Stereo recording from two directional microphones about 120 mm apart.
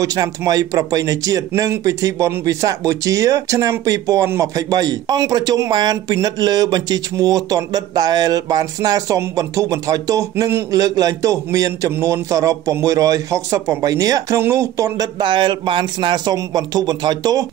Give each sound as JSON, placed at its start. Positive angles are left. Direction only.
{"t": 0.0, "sound": "speech", "side_deg": -30}
{"t": 15.1, "sound": "speech", "side_deg": -40}